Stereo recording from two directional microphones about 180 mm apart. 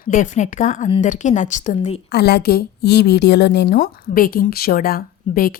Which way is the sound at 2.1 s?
65° left (ahead or behind).